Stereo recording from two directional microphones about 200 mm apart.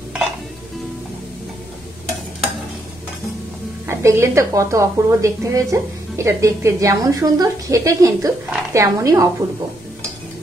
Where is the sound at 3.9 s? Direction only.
15° right (ahead or behind).